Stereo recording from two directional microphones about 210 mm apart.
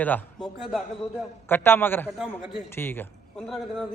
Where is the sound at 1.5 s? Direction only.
10° left (ahead or behind).